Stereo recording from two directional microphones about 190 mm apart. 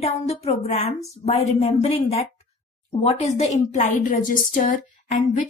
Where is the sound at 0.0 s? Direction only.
35° left (ahead or behind).